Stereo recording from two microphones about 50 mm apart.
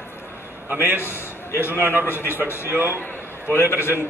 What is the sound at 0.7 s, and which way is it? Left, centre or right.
Speech, right.